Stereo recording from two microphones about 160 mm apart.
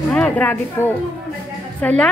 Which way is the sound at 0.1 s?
10° left (ahead or behind).